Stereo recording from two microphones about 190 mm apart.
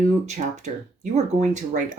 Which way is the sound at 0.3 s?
40° right (ahead or behind).